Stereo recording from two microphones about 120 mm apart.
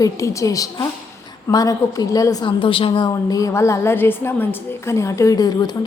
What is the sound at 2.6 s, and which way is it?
A woman's voice, 45° left (ahead or behind).